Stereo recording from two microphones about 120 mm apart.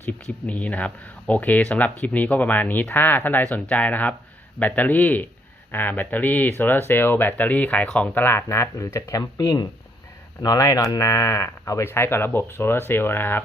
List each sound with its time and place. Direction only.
0.0 s speech: 10° left (ahead or behind)